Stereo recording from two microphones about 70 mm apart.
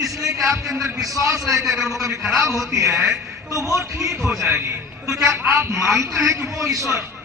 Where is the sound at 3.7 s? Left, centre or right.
Right.